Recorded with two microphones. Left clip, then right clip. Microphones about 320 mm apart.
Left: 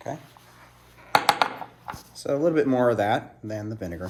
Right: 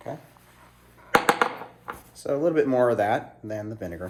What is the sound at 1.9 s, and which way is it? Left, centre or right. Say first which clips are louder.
Speech: left 1 dB; left.